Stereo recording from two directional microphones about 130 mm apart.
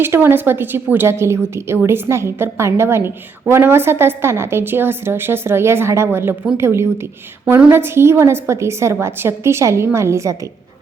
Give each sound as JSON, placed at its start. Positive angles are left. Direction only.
{"t": 0.0, "sound": "a woman's voice", "side_deg": -15}